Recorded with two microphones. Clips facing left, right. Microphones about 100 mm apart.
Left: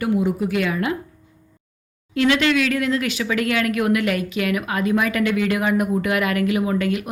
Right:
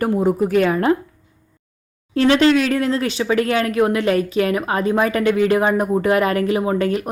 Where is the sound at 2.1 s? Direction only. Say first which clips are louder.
Right 4 dB; 35° right (ahead or behind).